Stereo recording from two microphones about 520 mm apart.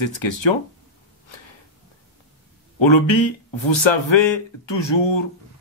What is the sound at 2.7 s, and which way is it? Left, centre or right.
Speech, left.